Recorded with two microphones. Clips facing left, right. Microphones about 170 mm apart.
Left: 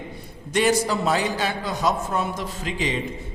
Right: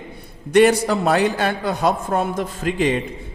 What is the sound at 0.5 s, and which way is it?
A man's voice, 60° right (ahead or behind).